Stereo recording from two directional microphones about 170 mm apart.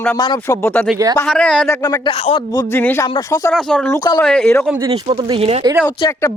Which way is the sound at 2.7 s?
10° left (ahead or behind).